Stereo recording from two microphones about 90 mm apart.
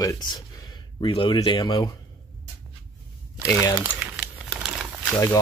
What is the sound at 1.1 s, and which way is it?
Speech, 75° left (ahead or behind).